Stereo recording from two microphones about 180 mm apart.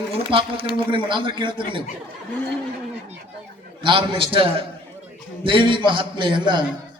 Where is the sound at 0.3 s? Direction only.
30° right (ahead or behind).